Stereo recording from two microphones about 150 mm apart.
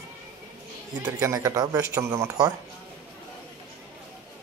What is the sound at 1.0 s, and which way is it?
Speech, 20° right (ahead or behind).